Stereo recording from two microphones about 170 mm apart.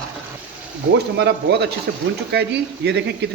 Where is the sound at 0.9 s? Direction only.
90° right.